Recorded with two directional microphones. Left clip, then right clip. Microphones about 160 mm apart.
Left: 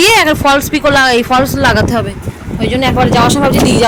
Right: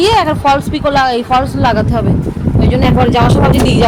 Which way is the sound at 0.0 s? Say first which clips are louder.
Left 2 dB; 25° left (ahead or behind).